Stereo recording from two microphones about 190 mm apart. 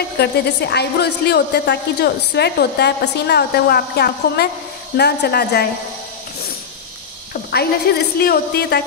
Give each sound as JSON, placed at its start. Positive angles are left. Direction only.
{"t": 0.2, "sound": "a woman's voice", "side_deg": 65}
{"t": 7.9, "sound": "a woman's voice", "side_deg": 55}